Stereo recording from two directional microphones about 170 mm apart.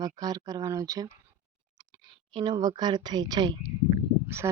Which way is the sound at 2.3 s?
25° right (ahead or behind).